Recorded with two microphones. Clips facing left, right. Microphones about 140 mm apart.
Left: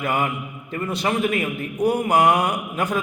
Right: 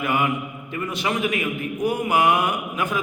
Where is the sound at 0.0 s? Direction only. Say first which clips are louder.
Right 1 dB; 40° left (ahead or behind).